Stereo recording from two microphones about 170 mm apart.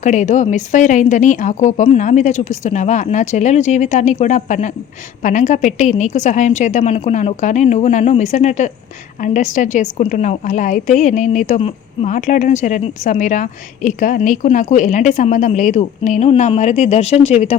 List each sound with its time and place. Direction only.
0.0 s a woman's voice: 45° left (ahead or behind)